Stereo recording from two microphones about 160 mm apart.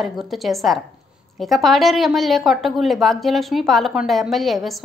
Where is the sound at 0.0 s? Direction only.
Centre (ahead or behind).